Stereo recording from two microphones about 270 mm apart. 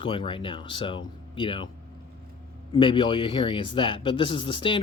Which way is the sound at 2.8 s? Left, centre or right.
Centre.